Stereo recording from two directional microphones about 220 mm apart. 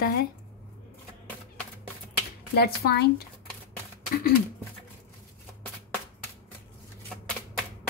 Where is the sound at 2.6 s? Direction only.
45° left (ahead or behind).